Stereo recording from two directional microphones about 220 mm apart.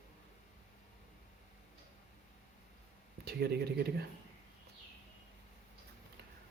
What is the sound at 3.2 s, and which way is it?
Speech, 45° right (ahead or behind).